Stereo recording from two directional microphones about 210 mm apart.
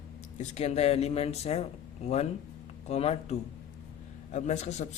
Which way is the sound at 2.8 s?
30° left (ahead or behind).